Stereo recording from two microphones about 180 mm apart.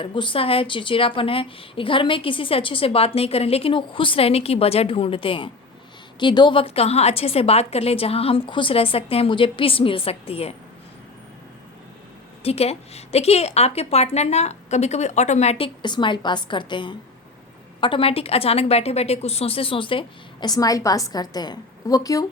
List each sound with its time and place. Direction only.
0.0 s a woman's voice: 25° left (ahead or behind)
12.4 s a woman's voice: 35° left (ahead or behind)